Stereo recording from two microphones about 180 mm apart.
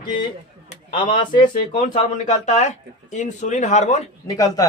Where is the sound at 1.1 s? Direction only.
45° left (ahead or behind).